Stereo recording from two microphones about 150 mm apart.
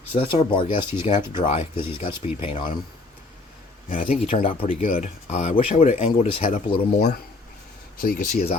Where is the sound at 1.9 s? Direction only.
35° left (ahead or behind).